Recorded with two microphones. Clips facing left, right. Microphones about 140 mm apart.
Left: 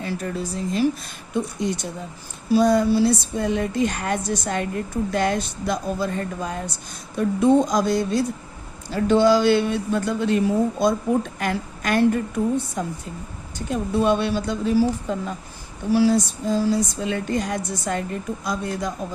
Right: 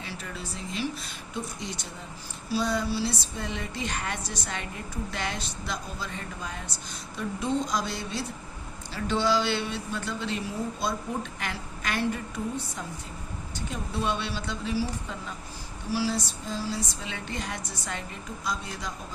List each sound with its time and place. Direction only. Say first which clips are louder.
0.0 s a woman's voice: left 11 dB; 45° left (ahead or behind)